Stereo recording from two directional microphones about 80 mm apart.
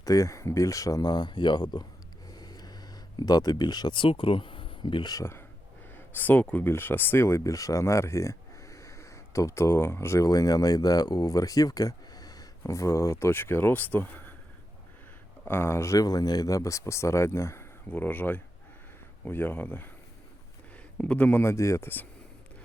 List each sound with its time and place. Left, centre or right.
0.0 s speech: left
2.3 s a sound: left
5.2 s speech: left
15.4 s speech: left
16.0 s speech: left
17.9 s speech: left
21.0 s a man's voice: centre
21.4 s speech: left